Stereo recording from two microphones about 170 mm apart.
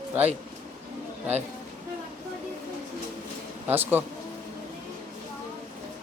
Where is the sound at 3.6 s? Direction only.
10° right (ahead or behind).